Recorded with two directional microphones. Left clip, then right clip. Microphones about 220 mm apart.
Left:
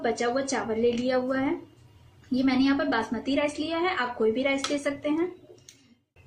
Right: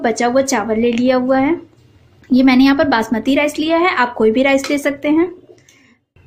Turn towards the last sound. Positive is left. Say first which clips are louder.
# right 12 dB
turn(degrees=-40)  # may be behind; listen again after turning